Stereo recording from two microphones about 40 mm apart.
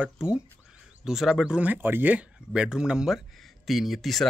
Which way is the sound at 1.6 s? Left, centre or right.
Right.